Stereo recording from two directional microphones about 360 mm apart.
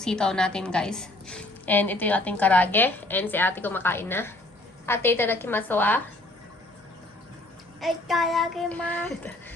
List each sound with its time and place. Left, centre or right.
0.0 s a woman's voice: centre
7.8 s a woman's voice: centre